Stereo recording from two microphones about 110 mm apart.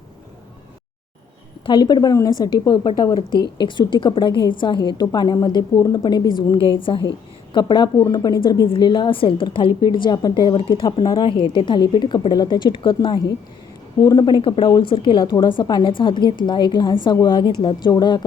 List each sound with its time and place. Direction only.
1.6 s a woman's voice: 45° left (ahead or behind)
6.7 s a woman's voice: 50° left (ahead or behind)
8.6 s a woman's voice: 50° left (ahead or behind)
11.3 s a woman's voice: 50° left (ahead or behind)
14.4 s a woman's voice: 55° left (ahead or behind); by 18.3 s 40° left (ahead or behind)